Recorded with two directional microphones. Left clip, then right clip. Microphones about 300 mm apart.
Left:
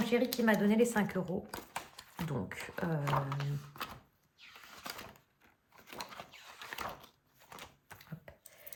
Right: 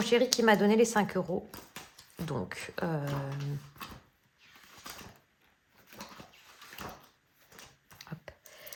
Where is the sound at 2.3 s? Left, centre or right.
Centre.